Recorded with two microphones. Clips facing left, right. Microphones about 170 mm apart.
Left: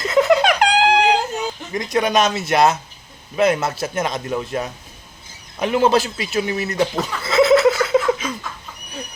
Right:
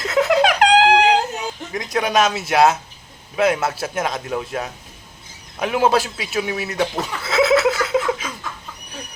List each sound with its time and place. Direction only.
0.1 s giggle: 5° right (ahead or behind)
1.7 s a man's voice: 5° right (ahead or behind)